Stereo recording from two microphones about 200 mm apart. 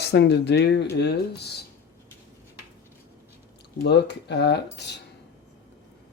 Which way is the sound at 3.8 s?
60° left (ahead or behind).